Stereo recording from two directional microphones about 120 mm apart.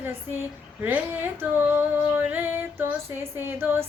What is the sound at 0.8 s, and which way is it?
Speech, 15° right (ahead or behind).